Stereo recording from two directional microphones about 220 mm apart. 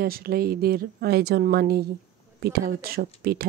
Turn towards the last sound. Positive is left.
turn(degrees=-45)  # may be behind; listen again after turning